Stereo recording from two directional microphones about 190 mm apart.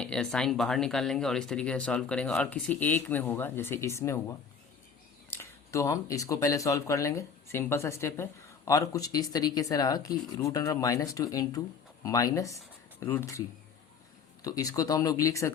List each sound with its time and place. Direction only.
0.0 s speech: 5° left (ahead or behind)
14.4 s speech: 20° left (ahead or behind)